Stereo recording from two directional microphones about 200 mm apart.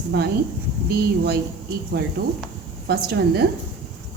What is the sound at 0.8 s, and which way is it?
Speech, 55° right (ahead or behind).